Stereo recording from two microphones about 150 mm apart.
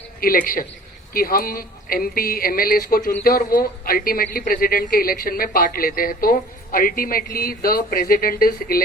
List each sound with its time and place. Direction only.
0.2 s a woman's voice: 70° left (ahead or behind)